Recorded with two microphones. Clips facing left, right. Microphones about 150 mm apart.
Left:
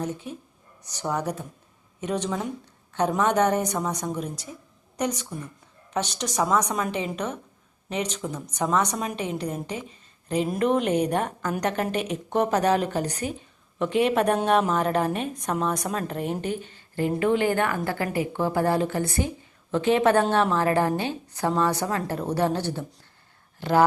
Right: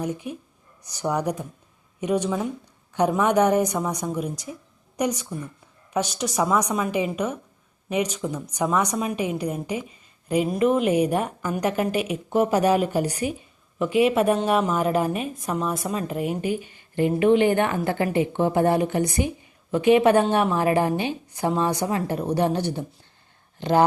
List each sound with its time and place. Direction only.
0.0 s a woman's voice: 10° right (ahead or behind)